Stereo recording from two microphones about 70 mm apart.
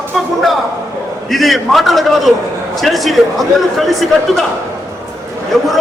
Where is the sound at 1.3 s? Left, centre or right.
Centre.